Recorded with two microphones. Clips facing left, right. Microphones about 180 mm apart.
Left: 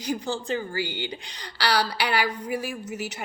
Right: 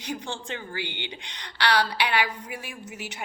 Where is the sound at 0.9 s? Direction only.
40° left (ahead or behind).